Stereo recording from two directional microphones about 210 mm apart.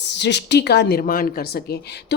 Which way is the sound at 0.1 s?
55° left (ahead or behind).